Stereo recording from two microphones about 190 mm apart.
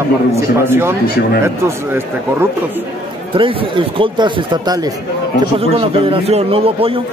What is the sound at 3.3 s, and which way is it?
A man's voice, 25° right (ahead or behind).